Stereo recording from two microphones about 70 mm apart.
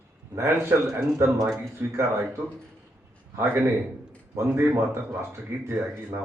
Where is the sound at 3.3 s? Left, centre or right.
Right.